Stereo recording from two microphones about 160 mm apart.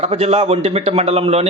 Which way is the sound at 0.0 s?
40° right (ahead or behind).